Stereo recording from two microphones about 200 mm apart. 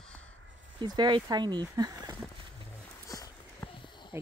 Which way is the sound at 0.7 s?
20° right (ahead or behind).